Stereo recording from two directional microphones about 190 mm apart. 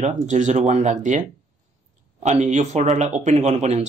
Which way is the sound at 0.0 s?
40° right (ahead or behind).